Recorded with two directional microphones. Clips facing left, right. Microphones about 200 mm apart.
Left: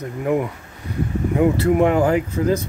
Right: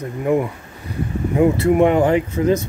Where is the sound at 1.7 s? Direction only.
Centre (ahead or behind).